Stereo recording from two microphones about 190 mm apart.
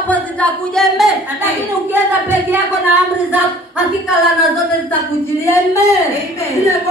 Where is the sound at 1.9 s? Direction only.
10° right (ahead or behind).